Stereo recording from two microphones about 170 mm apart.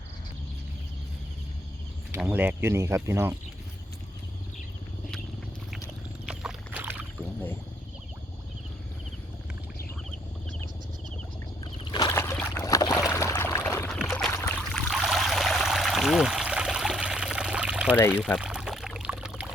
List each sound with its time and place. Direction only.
2.1 s speech: 10° right (ahead or behind)
6.2 s boat: 5° right (ahead or behind)
11.6 s boat: 25° left (ahead or behind)
12.1 s boat: 15° left (ahead or behind)
13.1 s a sound: 15° left (ahead or behind)
13.9 s a sound: centre (ahead or behind)
14.3 s a sound: 15° left (ahead or behind)
14.6 s stream: 5° left (ahead or behind)
18.3 s pour: 5° right (ahead or behind)